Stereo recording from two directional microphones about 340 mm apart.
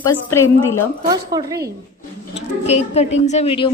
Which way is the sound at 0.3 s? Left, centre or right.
Centre.